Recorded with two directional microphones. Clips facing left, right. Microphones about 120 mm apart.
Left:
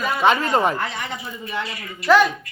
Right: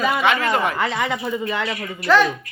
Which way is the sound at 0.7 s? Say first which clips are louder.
Right 5 dB; 90° right.